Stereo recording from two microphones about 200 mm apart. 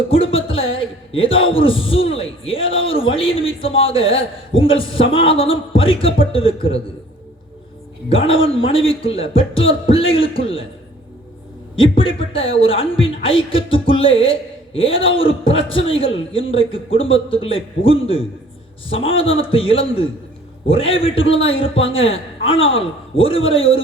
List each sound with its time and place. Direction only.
0.1 s a sound: 30° left (ahead or behind)
0.7 s a woman's voice: 25° left (ahead or behind)
8.1 s a man's voice: 30° left (ahead or behind)
11.8 s a man's voice: 25° left (ahead or behind)